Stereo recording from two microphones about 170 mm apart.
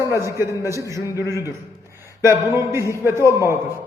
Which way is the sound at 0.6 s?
20° left (ahead or behind).